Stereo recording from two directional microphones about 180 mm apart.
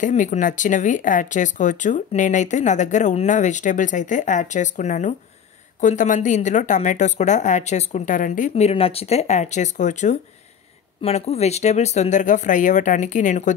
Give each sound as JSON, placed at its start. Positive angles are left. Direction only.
{"t": 0.0, "sound": "speech", "side_deg": 40}